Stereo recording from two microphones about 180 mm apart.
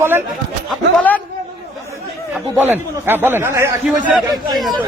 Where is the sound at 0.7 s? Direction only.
5° left (ahead or behind).